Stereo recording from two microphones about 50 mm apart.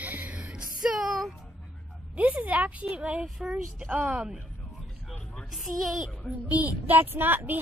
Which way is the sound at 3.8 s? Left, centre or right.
Right.